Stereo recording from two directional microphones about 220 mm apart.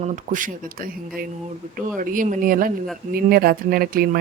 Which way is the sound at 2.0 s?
35° right (ahead or behind).